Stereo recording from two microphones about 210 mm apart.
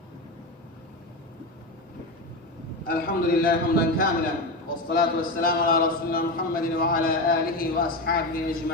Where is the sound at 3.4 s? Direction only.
45° left (ahead or behind).